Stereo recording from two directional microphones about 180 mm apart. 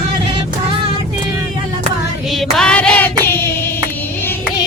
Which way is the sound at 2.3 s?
Centre (ahead or behind).